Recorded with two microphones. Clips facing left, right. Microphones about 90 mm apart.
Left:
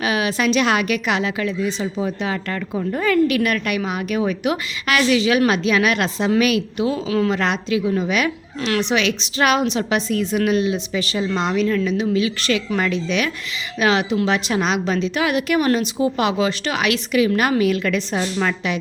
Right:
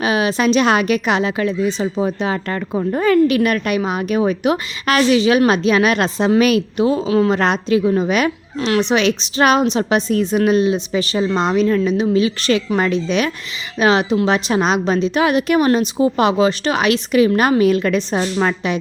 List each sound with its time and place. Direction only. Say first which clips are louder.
0.0 s a woman's voice: right 3 dB; 30° right (ahead or behind)